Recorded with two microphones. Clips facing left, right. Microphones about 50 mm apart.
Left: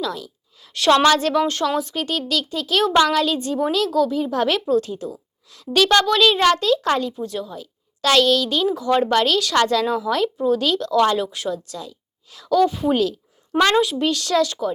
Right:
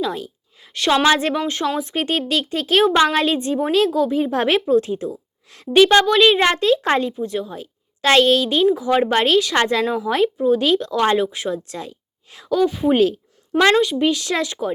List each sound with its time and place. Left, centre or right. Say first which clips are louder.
0.0 s a sound: right 3 dB; right
0.7 s speech: left 2 dB; centre
1.0 s speech: left 1 dB; right
2.0 s a child's voice: right 3 dB; right
7.5 s a woman's voice: right 2 dB; right
8.7 s speech: right 1 dB; centre
9.1 s speech: right 1 dB; right
12.5 s speech: left 1 dB; centre
12.9 s a child's voice: right 4 dB; right
13.5 s a woman's voice: right 2 dB; centre
14.0 s speech: even; centre